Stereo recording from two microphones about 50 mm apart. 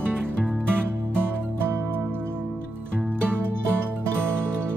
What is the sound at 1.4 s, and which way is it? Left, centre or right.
Music, right.